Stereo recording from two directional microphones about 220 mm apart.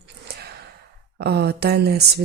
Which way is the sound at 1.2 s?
50° right (ahead or behind).